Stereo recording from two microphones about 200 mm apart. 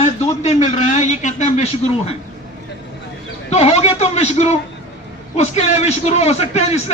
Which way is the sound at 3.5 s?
30° left (ahead or behind).